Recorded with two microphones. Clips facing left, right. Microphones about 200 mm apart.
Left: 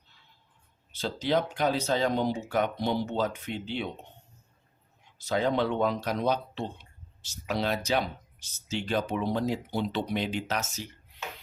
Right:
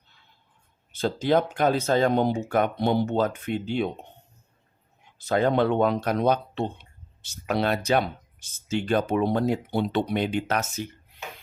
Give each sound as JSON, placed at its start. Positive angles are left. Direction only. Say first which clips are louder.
{"t": 0.9, "sound": "speech", "louder": "right 5 dB", "side_deg": -50}
{"t": 5.1, "sound": "speech", "louder": "right 5 dB", "side_deg": -55}